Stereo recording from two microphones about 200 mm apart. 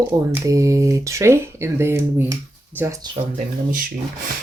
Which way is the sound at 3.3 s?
45° right (ahead or behind).